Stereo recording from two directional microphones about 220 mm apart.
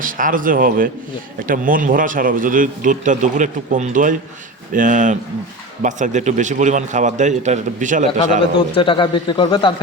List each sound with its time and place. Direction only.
0.0 s speech: 40° right (ahead or behind)
8.5 s speech: 25° left (ahead or behind)